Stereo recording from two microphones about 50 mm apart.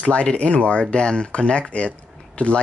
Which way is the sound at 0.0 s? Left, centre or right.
Left.